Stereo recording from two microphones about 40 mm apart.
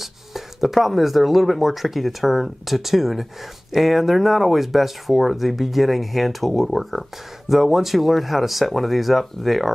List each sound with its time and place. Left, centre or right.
0.0 s speech: centre